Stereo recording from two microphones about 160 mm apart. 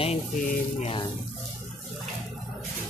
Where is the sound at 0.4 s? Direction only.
55° left (ahead or behind).